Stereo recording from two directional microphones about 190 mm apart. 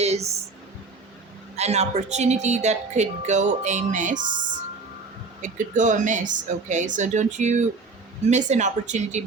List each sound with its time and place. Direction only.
0.0 s speech: 35° right (ahead or behind)
1.5 s a woman's voice: 35° right (ahead or behind)
5.4 s a woman's voice: 40° right (ahead or behind)